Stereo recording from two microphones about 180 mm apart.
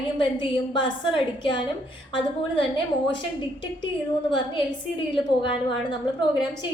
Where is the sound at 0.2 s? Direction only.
30° left (ahead or behind).